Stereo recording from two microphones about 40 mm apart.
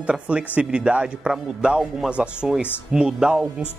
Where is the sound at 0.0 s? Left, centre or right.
Right.